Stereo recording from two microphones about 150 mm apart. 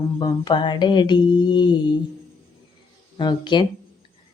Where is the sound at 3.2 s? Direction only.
30° left (ahead or behind).